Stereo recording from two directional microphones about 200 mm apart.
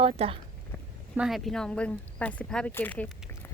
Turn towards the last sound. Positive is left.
turn(degrees=10)  # may be behind; listen again after turning